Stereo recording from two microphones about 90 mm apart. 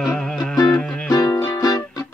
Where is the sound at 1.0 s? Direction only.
45° left (ahead or behind).